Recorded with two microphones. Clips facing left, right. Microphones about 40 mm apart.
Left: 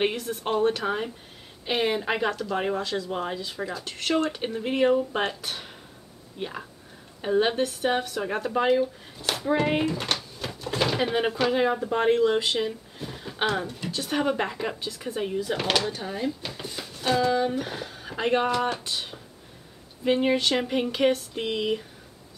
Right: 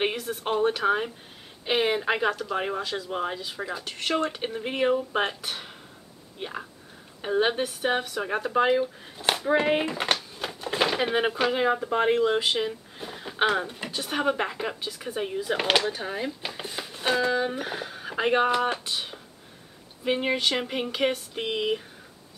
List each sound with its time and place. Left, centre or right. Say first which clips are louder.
0.0 s speech: left 1 dB; centre
9.8 s speech: right 1 dB; right; by 15.5 s centre
15.5 s speech: right 4 dB; centre